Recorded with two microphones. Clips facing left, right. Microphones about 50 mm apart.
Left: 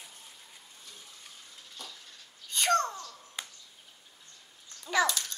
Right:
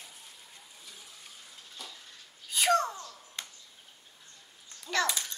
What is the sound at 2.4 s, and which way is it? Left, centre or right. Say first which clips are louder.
Babbling: right 1 dB; centre.